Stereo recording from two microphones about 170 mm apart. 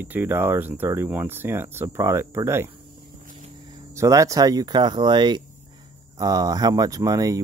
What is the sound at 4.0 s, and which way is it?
Speech, 20° right (ahead or behind).